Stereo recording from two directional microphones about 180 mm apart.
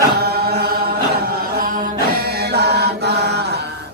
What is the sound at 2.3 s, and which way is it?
Chant, 65° right (ahead or behind).